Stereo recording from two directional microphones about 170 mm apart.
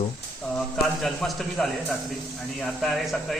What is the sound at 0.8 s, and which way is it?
A man's voice, centre (ahead or behind).